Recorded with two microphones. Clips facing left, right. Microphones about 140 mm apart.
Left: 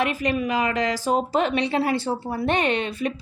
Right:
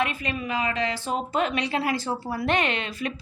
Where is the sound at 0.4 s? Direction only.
45° left (ahead or behind).